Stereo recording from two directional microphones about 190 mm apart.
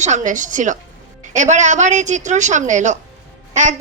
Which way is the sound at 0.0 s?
40° right (ahead or behind).